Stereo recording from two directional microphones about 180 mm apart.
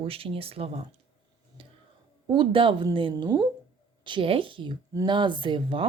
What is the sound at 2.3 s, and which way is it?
Speech, 25° right (ahead or behind).